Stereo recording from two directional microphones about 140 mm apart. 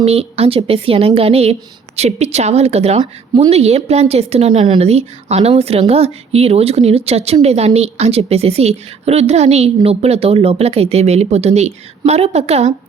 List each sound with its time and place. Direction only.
0.0 s a woman's voice: 45° right (ahead or behind)
3.0 s speech: 35° right (ahead or behind)
3.5 s a woman's voice: 50° right (ahead or behind)